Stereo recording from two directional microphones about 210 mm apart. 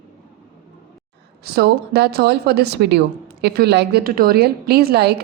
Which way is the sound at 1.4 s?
50° right (ahead or behind).